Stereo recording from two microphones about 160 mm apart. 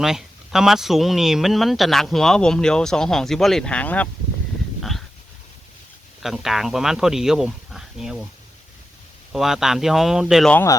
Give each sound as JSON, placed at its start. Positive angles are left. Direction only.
{"t": 0.0, "sound": "speech", "side_deg": 0}
{"t": 4.8, "sound": "a sound", "side_deg": 0}
{"t": 6.2, "sound": "speech", "side_deg": 0}
{"t": 9.3, "sound": "speech", "side_deg": 0}
{"t": 10.5, "sound": "speech", "side_deg": 15}